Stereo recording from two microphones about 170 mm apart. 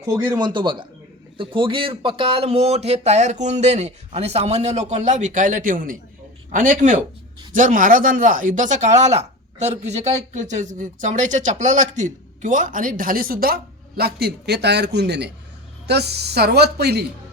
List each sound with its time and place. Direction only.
0.0 s a woman's voice: 25° right (ahead or behind); by 17.1 s 70° right (ahead or behind)